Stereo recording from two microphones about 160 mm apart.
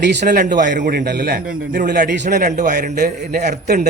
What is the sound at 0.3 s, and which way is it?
A man's voice, 55° right (ahead or behind).